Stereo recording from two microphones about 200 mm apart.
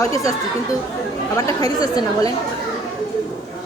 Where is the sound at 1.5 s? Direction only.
20° left (ahead or behind).